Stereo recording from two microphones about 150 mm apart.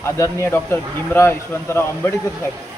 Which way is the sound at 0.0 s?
15° left (ahead or behind).